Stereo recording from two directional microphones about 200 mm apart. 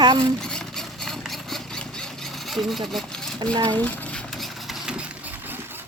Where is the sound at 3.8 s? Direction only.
10° left (ahead or behind).